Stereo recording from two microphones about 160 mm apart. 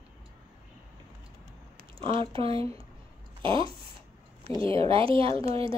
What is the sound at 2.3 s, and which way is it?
Speech, 35° right (ahead or behind).